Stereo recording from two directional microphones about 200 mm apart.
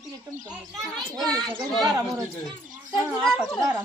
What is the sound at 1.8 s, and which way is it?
Speech, 15° right (ahead or behind).